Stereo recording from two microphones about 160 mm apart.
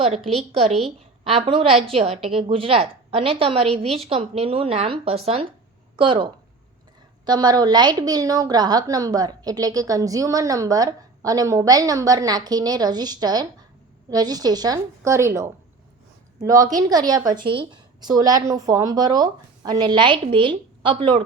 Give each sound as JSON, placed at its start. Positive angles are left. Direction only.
{"t": 0.5, "sound": "a woman's voice", "side_deg": -35}